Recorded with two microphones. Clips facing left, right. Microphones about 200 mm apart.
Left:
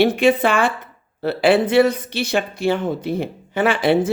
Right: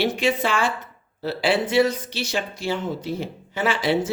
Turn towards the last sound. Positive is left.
turn(degrees=55)  # may be behind; listen again after turning